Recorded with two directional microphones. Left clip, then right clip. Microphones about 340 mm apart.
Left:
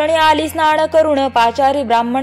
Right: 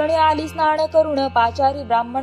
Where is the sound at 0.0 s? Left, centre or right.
Centre.